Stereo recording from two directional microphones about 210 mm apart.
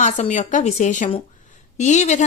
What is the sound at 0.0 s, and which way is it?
Speech, 35° left (ahead or behind).